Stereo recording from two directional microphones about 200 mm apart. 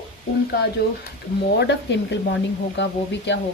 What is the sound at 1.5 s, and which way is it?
Speech, 60° left (ahead or behind).